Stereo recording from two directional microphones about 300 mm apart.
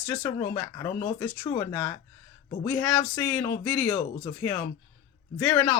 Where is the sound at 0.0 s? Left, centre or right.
Centre.